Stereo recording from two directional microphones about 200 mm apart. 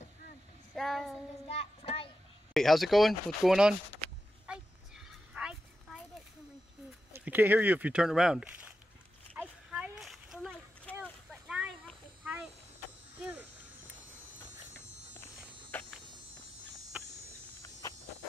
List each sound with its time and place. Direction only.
0.7 s speech: centre (ahead or behind)
1.5 s child singing: 30° left (ahead or behind)
2.5 s speech: centre (ahead or behind)
4.5 s a sound: 5° right (ahead or behind)
7.1 s speech: 10° right (ahead or behind)
9.3 s a sound: 10° right (ahead or behind)
15.7 s insect: 10° left (ahead or behind)